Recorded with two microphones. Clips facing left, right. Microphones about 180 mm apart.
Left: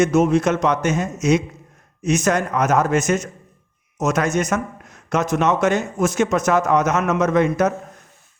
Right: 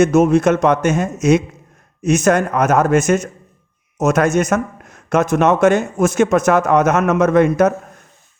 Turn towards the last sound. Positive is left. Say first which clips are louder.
# right 5 dB
turn(degrees=-55)  # may be behind; listen again after turning